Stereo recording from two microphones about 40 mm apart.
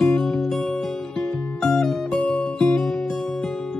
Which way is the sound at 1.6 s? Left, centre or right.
Centre.